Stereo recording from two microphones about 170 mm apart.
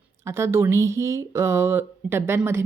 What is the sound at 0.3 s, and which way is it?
Speech, 15° right (ahead or behind).